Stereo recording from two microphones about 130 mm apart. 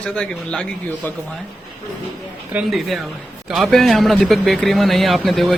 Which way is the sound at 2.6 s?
Centre (ahead or behind).